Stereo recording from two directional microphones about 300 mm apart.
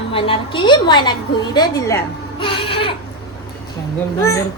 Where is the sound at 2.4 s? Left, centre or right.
Centre.